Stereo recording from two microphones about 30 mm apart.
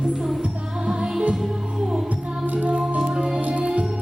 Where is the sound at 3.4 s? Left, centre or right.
Right.